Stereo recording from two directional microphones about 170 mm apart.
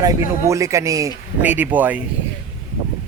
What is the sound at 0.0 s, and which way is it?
A man's voice, 20° right (ahead or behind).